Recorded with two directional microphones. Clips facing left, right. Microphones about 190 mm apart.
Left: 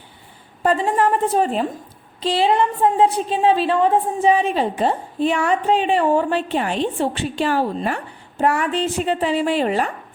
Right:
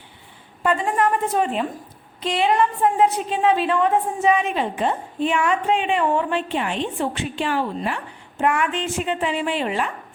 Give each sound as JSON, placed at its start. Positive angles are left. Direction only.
{"t": 0.6, "sound": "a woman's voice", "side_deg": 35}